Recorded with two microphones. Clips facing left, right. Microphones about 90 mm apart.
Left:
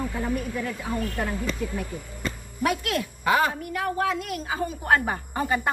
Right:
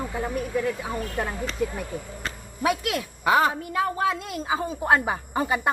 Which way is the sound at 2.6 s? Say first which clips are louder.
Right 1 dB; 20° right (ahead or behind).